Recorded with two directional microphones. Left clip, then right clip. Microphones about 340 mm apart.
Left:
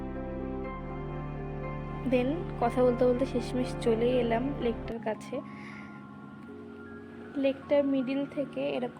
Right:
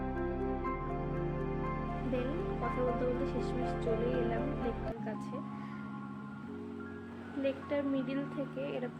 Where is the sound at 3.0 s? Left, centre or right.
Left.